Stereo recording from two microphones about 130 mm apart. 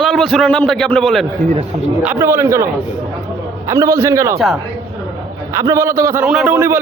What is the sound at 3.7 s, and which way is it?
Speech, 25° right (ahead or behind).